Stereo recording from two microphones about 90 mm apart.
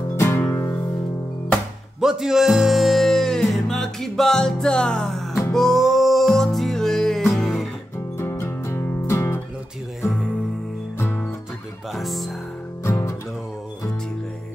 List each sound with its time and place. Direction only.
0.2 s music: 25° left (ahead or behind)
2.0 s music: 5° right (ahead or behind)
8.2 s music: 30° left (ahead or behind)
11.9 s speech: centre (ahead or behind)